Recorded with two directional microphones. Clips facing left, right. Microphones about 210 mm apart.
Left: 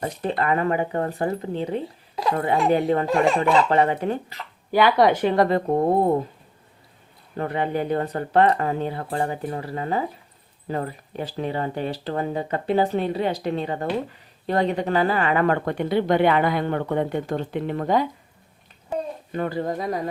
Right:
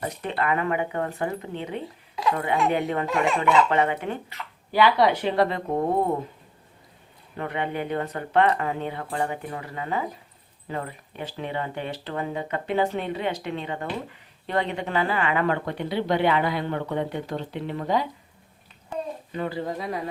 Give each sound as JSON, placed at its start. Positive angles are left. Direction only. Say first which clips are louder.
{"t": 0.0, "sound": "speech", "louder": "left 3 dB", "side_deg": 35}
{"t": 7.3, "sound": "speech", "louder": "left 4 dB", "side_deg": 35}
{"t": 19.3, "sound": "speech", "louder": "left 4 dB", "side_deg": 50}